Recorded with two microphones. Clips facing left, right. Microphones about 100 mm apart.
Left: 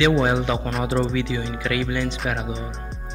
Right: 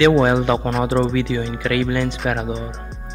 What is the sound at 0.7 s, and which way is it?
Speech, centre (ahead or behind).